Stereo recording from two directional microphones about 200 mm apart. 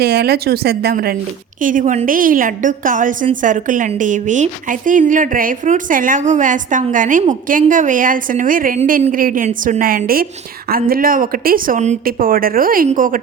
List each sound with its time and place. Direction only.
0.0 s a woman's voice: 55° right (ahead or behind)
1.6 s a woman's voice: 40° right (ahead or behind)